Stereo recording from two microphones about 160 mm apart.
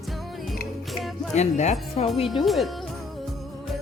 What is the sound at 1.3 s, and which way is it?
Speech, 45° left (ahead or behind).